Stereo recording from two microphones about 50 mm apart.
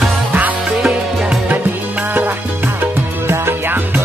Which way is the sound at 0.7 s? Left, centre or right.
Centre.